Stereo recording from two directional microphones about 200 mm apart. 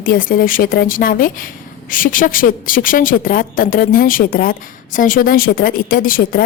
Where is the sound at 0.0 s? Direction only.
45° left (ahead or behind).